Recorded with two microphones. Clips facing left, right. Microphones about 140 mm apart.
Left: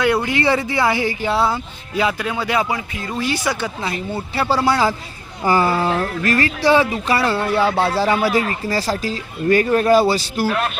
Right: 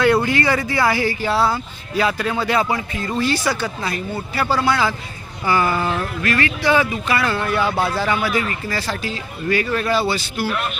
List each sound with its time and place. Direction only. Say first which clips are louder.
0.3 s speech: left 1 dB; 25° left (ahead or behind)